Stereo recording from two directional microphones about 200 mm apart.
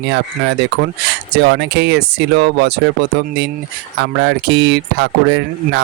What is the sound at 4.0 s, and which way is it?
Speech, 60° right (ahead or behind).